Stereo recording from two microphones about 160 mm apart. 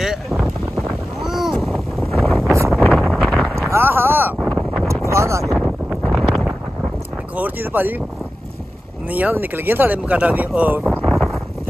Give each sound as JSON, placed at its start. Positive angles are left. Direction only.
{"t": 0.0, "sound": "boat", "side_deg": -5}
{"t": 1.2, "sound": "a sound", "side_deg": 0}
{"t": 2.9, "sound": "wind noise", "side_deg": 0}
{"t": 3.7, "sound": "a sound", "side_deg": -15}
{"t": 4.5, "sound": "wind noise", "side_deg": 5}
{"t": 4.8, "sound": "wind noise", "side_deg": -15}
{"t": 6.0, "sound": "wind noise", "side_deg": 0}
{"t": 7.3, "sound": "speech", "side_deg": -10}
{"t": 9.1, "sound": "speech", "side_deg": -10}
{"t": 10.9, "sound": "a sound", "side_deg": 5}